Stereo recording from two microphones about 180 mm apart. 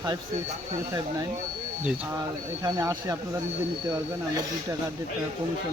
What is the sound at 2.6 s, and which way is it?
Speech, 20° right (ahead or behind).